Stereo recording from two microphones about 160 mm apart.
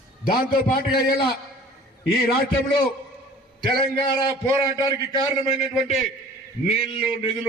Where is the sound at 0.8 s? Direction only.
70° left (ahead or behind).